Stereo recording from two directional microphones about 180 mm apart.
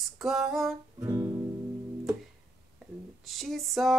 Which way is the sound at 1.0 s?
15° right (ahead or behind).